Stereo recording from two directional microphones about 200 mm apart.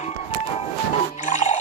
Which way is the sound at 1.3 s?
40° left (ahead or behind).